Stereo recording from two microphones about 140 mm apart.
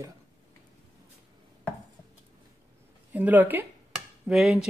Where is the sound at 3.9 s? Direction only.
Centre (ahead or behind).